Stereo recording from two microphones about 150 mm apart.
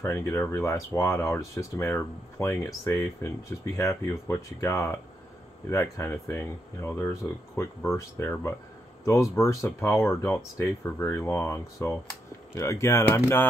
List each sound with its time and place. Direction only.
0.0 s speech: 15° left (ahead or behind)
9.7 s speech: 10° left (ahead or behind)